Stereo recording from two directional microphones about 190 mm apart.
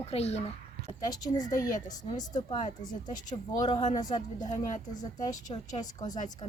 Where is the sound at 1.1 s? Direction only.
20° left (ahead or behind).